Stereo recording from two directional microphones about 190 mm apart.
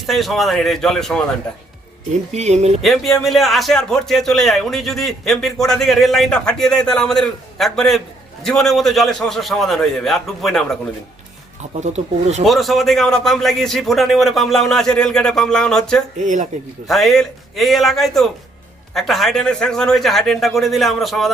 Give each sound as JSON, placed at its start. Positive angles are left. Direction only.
{"t": 0.0, "sound": "speech", "side_deg": 0}
{"t": 2.3, "sound": "speech", "side_deg": -35}
{"t": 2.8, "sound": "speech", "side_deg": 0}
{"t": 11.8, "sound": "speech", "side_deg": -35}
{"t": 12.5, "sound": "speech", "side_deg": 0}
{"t": 16.1, "sound": "speech", "side_deg": -40}
{"t": 16.8, "sound": "speech", "side_deg": 0}